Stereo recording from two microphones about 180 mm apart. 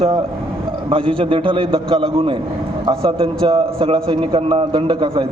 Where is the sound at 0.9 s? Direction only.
30° right (ahead or behind).